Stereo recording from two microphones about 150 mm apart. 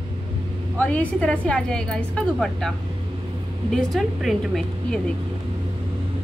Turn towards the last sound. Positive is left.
turn(degrees=5)  # may be behind; listen again after turning